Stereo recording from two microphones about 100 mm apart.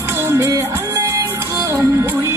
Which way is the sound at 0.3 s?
25° right (ahead or behind).